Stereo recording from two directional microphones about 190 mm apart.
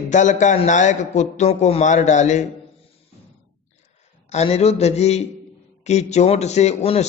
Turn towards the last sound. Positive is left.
turn(degrees=35)  # may be behind; listen again after turning